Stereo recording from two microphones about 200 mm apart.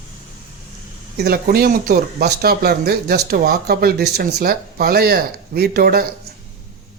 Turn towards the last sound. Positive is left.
turn(degrees=-50)  # may be behind; listen again after turning